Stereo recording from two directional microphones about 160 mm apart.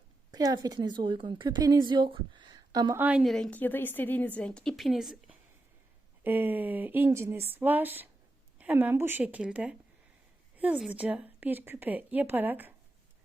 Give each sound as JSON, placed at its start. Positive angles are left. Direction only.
{"t": 0.3, "sound": "speech", "side_deg": -25}
{"t": 2.9, "sound": "a woman's voice", "side_deg": -10}